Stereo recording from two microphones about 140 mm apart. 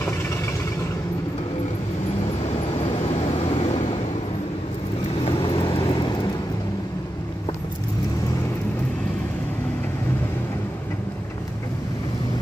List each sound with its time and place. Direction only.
3.0 s vehicle: 50° left (ahead or behind)
5.2 s vehicle: 35° left (ahead or behind)